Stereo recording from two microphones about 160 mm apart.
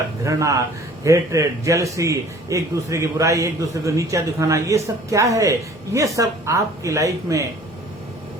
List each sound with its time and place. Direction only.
0.2 s a man's voice: 20° right (ahead or behind)